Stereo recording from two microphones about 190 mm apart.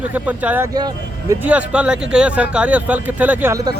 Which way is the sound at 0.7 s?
20° right (ahead or behind).